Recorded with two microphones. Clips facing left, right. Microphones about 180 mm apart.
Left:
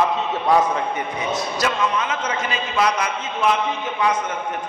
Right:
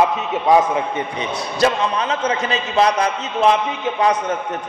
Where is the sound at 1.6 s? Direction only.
35° right (ahead or behind).